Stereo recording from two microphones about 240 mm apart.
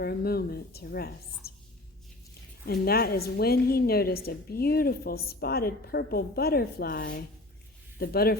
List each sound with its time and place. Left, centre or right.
0.0 s a woman's voice: left
2.8 s a woman's voice: left